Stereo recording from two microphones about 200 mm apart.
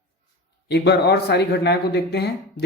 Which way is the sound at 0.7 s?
55° left (ahead or behind).